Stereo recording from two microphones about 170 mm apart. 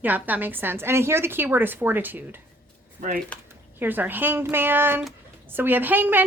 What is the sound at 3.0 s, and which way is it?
Speech, 45° right (ahead or behind).